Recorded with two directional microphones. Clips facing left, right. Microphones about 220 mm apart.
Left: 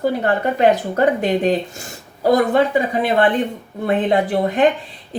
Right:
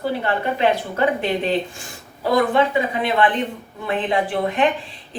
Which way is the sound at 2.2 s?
40° left (ahead or behind).